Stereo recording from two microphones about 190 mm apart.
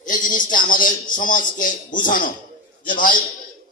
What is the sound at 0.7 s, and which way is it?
Speech, 45° left (ahead or behind).